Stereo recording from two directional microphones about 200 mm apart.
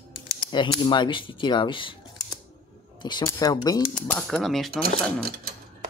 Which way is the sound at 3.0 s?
20° left (ahead or behind).